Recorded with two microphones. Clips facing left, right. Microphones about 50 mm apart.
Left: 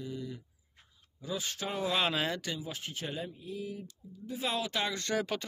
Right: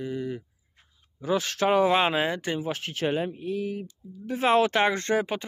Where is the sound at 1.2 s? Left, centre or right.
Right.